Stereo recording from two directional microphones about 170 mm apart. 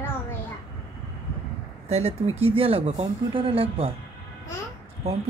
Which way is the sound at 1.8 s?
40° right (ahead or behind).